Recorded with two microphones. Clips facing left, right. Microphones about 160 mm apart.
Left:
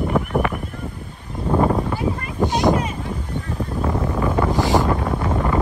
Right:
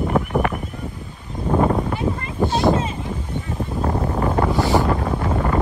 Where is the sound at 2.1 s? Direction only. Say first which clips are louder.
Even; 25° right (ahead or behind).